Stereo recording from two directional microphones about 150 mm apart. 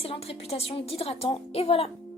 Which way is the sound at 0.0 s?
40° left (ahead or behind).